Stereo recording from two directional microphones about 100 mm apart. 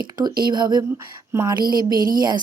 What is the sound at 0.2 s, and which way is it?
Speech, 45° right (ahead or behind).